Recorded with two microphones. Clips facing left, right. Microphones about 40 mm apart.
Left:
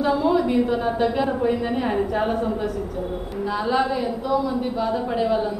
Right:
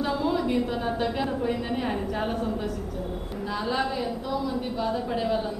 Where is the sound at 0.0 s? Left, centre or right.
Centre.